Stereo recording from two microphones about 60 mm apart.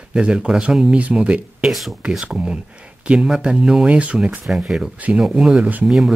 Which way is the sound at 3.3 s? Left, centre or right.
Centre.